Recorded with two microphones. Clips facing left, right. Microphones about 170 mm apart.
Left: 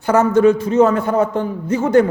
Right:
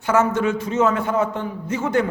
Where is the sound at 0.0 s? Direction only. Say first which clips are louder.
Left 6 dB; 35° left (ahead or behind).